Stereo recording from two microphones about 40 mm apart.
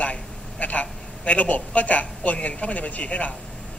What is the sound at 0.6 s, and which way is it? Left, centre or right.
A man's voice, left.